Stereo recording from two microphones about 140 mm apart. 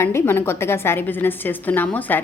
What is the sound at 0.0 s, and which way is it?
A woman's voice, 15° left (ahead or behind).